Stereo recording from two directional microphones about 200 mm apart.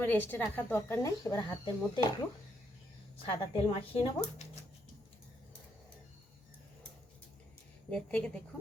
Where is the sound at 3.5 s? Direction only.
25° left (ahead or behind).